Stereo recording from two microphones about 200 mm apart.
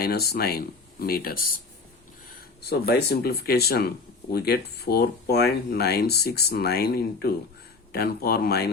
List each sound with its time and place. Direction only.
0.0 s speech: 50° left (ahead or behind)
2.6 s speech: 55° left (ahead or behind)